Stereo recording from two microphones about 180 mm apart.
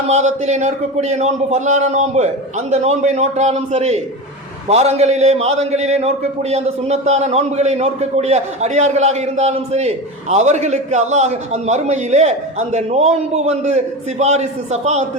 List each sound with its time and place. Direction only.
0.1 s a man's voice: 40° right (ahead or behind)